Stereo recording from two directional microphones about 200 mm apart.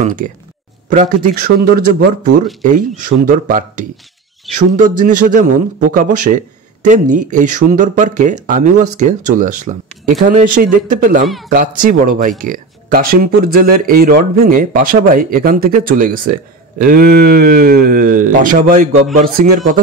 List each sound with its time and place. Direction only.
0.0 s a man's voice: 40° right (ahead or behind)